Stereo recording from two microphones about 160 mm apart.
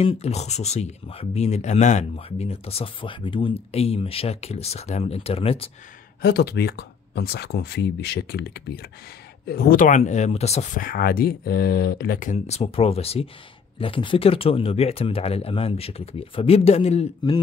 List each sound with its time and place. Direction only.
0.0 s speech: 40° left (ahead or behind)
6.2 s speech: 90° left
9.5 s speech: 70° left (ahead or behind); by 17.1 s 40° left (ahead or behind)